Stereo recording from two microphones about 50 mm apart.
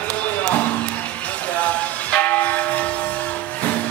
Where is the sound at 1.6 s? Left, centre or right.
Left.